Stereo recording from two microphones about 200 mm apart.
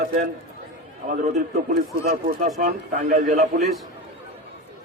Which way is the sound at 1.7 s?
45° right (ahead or behind).